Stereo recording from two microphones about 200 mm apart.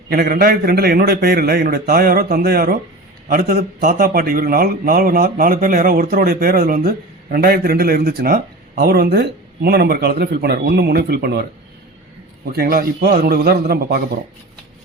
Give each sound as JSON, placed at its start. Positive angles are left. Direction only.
{"t": 0.1, "sound": "a man's voice", "side_deg": -50}
{"t": 12.5, "sound": "a man's voice", "side_deg": -50}